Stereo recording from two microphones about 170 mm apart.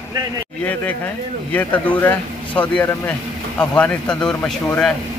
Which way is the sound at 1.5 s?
10° left (ahead or behind).